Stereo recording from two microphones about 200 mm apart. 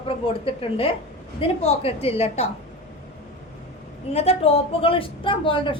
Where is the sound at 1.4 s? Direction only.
30° left (ahead or behind).